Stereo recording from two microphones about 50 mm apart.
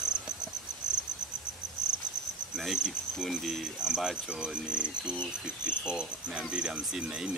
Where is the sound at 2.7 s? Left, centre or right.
Centre.